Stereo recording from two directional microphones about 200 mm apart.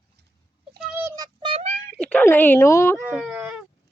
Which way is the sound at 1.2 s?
25° right (ahead or behind).